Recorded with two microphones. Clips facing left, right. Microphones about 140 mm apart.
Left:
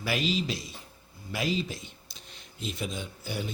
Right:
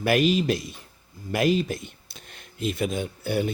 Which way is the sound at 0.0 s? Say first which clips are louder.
Right 8 dB; 55° right (ahead or behind).